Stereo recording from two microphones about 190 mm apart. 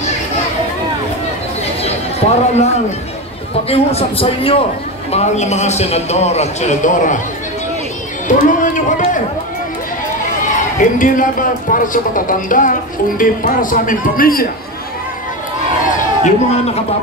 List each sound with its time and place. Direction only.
1.8 s a sound: 35° left (ahead or behind)
3.6 s a man's voice: 30° left (ahead or behind)
8.3 s run: 45° left (ahead or behind)
10.8 s speech: 45° left (ahead or behind)
16.3 s a man's voice: 35° left (ahead or behind)